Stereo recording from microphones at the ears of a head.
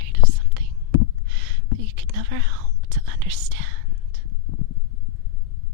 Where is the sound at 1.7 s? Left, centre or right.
Right.